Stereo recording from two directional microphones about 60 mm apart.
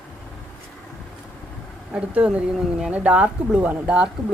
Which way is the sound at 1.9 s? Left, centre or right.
Centre.